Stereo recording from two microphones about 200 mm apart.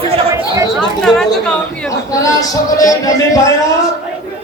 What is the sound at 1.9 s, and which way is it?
Speech, 15° left (ahead or behind).